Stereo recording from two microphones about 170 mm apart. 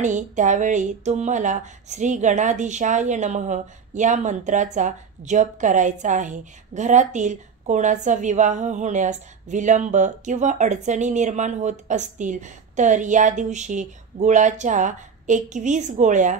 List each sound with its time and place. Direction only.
0.0 s a woman's voice: 45° right (ahead or behind)